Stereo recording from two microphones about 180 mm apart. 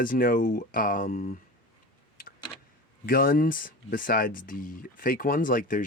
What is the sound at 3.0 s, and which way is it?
Speech, 55° left (ahead or behind).